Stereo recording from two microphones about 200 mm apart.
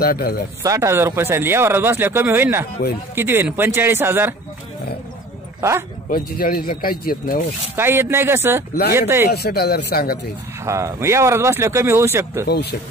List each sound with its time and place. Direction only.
0.0 s speech: 50° left (ahead or behind)
0.7 s speech: 15° right (ahead or behind)
5.6 s speech: 15° right (ahead or behind)
6.0 s speech: 45° left (ahead or behind)
7.7 s speech: 10° right (ahead or behind)
9.3 s speech: 50° left (ahead or behind)
10.6 s speech: 15° right (ahead or behind)